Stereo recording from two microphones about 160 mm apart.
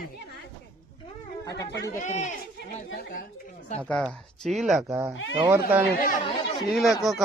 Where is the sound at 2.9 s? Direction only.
65° left (ahead or behind).